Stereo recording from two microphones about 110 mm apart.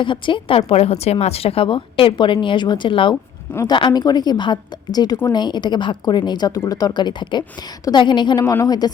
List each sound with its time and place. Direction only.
0.0 s a woman's voice: 50° left (ahead or behind)
0.7 s a woman's voice: 65° left (ahead or behind); by 8.9 s 35° left (ahead or behind)